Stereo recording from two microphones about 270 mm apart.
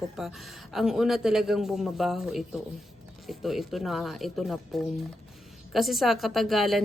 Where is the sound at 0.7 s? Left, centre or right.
Centre.